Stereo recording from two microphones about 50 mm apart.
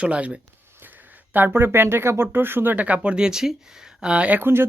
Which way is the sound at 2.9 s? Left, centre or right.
Centre.